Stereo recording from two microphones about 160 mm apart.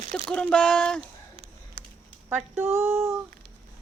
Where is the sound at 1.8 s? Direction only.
65° right (ahead or behind).